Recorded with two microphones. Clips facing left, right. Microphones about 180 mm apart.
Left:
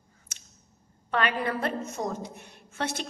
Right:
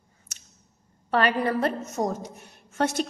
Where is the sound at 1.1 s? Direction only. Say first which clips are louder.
Right 4 dB; 40° right (ahead or behind).